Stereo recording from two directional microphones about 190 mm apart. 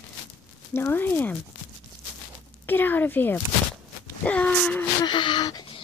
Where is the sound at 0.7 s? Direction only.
10° left (ahead or behind).